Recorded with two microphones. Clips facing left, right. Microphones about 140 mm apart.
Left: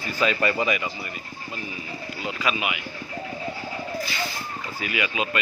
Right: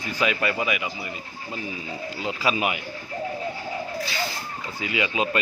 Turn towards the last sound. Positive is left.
turn(degrees=-30)  # may be behind; listen again after turning